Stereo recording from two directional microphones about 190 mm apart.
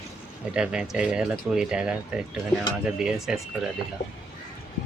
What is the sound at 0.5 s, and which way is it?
Speech, 5° right (ahead or behind).